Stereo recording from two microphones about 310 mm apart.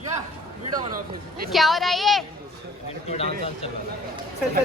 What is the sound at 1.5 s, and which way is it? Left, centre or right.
Speech, centre.